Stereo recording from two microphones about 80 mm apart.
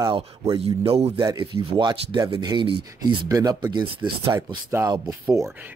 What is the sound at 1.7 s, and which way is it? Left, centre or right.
Speech, right.